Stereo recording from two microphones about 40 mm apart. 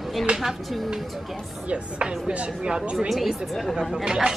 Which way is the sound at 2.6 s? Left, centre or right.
Centre.